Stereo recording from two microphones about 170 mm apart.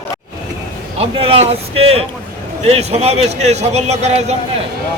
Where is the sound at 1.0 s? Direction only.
35° right (ahead or behind).